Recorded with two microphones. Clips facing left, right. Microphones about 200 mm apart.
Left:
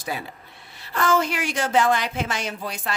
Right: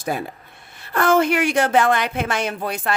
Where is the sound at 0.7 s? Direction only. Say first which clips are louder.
Right 5 dB; 55° right (ahead or behind).